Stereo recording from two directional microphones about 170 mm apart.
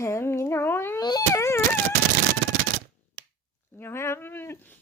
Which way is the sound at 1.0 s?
20° left (ahead or behind).